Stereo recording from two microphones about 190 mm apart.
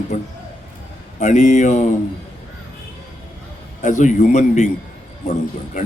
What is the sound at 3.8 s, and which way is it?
A man's voice, 40° left (ahead or behind).